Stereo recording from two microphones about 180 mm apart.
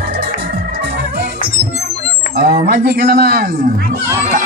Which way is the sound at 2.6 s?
60° right (ahead or behind).